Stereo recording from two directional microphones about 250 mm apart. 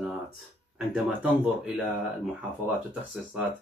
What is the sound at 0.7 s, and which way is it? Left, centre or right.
Speech, centre.